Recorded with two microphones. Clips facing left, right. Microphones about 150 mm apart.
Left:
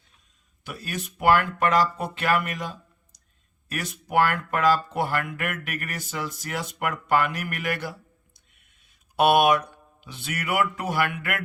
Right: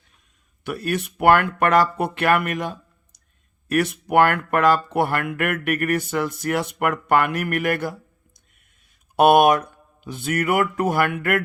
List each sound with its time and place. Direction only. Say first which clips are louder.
0.6 s speech: right 9 dB; 60° right (ahead or behind)